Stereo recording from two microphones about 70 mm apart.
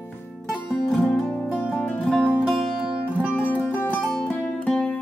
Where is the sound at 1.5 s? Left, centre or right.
Left.